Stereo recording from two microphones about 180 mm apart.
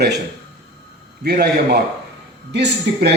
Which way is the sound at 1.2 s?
65° right (ahead or behind).